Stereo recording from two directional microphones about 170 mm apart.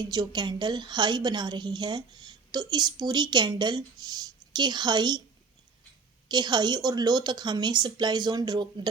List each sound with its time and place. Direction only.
0.0 s a woman's voice: 25° right (ahead or behind)
6.2 s a woman's voice: 25° right (ahead or behind)